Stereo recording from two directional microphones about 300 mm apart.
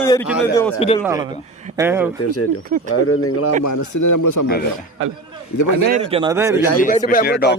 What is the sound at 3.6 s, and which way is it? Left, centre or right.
Speech, left.